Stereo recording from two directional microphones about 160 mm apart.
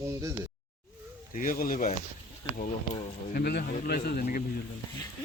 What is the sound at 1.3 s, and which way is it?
Speech, 60° left (ahead or behind).